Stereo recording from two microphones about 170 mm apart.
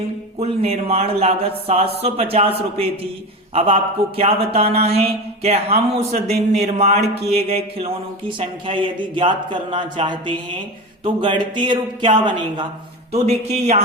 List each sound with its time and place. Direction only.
0.3 s a man's voice: 35° right (ahead or behind)
13.1 s speech: 40° right (ahead or behind)